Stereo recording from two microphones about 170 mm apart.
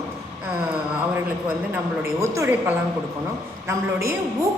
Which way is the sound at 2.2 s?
15° right (ahead or behind).